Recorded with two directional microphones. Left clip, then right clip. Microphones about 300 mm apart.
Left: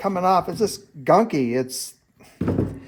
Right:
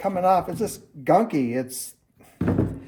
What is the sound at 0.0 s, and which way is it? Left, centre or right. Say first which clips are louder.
Speech: left 1 dB; left.